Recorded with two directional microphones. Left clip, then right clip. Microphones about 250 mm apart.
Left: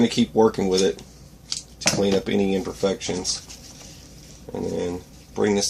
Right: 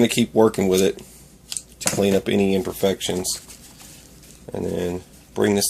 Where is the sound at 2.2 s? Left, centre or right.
Right.